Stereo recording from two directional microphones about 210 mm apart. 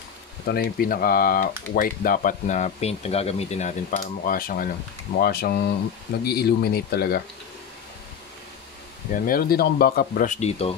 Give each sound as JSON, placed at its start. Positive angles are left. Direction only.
{"t": 0.5, "sound": "speech", "side_deg": 45}
{"t": 4.0, "sound": "speech", "side_deg": 40}
{"t": 9.1, "sound": "speech", "side_deg": 40}